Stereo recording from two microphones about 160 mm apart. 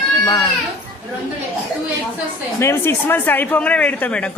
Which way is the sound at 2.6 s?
15° left (ahead or behind).